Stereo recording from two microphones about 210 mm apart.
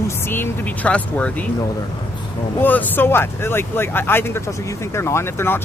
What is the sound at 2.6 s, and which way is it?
Speech, 10° left (ahead or behind).